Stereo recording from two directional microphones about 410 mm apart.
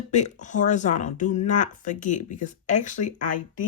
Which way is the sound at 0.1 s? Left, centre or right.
Centre.